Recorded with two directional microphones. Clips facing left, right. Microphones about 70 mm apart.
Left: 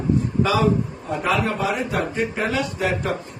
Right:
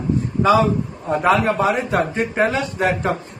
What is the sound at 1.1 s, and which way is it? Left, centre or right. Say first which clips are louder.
A man's voice: right 6 dB; right.